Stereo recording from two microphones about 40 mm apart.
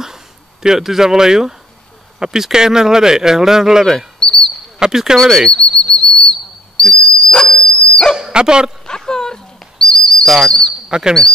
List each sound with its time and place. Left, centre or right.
0.0 s a sound: centre
2.1 s speech: centre
4.2 s a sound: left
4.7 s speech: centre
5.1 s bird flight: centre
5.5 s whistle: left
7.0 s dog: left
8.2 s speech: right
8.8 s speech: centre
9.8 s bird: centre
10.2 s bird flight: centre
10.9 s speech: right